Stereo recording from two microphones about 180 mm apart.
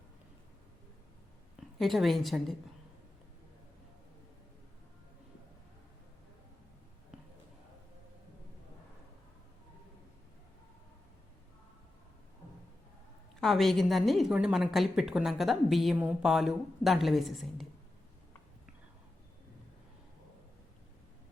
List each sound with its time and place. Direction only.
1.8 s a woman's voice: centre (ahead or behind)
13.4 s a woman's voice: centre (ahead or behind)